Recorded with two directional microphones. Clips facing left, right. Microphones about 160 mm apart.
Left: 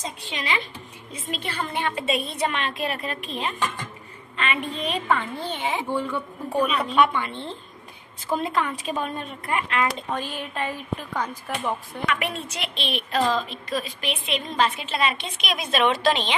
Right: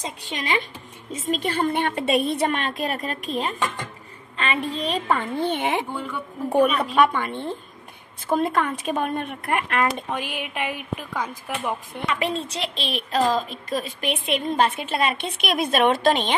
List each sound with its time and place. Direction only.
0.2 s a woman's voice: 45° right (ahead or behind)
5.4 s a woman's voice: 55° right (ahead or behind)
10.1 s speech: 15° right (ahead or behind)
12.1 s a woman's voice: 30° right (ahead or behind); by 16.3 s 50° right (ahead or behind)